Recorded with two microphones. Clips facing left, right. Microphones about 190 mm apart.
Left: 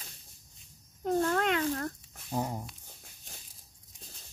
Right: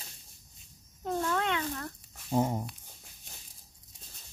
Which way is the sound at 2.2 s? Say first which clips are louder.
Right 5 dB; 20° right (ahead or behind).